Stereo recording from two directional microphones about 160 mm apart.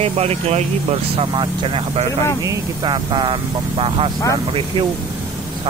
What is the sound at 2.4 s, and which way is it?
Speech, 25° right (ahead or behind).